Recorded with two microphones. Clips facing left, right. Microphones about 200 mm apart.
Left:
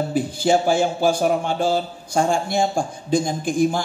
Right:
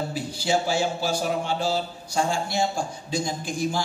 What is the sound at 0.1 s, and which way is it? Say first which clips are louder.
A woman's voice: left 9 dB; 50° left (ahead or behind).